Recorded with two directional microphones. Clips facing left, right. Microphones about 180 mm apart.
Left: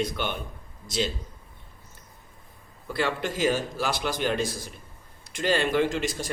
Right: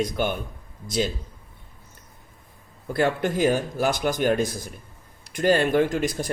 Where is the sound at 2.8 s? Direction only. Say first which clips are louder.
Right 5 dB; 50° right (ahead or behind).